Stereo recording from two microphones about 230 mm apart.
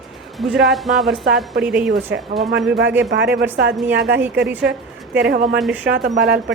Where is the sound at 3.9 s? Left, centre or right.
Right.